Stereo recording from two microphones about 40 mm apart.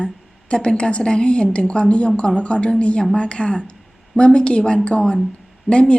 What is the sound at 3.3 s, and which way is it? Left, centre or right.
A woman's voice, left.